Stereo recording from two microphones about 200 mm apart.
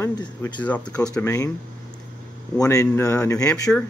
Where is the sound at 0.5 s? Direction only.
5° left (ahead or behind).